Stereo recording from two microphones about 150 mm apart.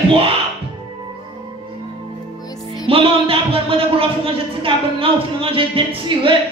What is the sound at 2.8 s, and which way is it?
A man's voice, 40° right (ahead or behind).